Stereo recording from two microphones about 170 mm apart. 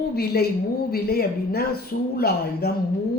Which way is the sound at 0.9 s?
65° left (ahead or behind).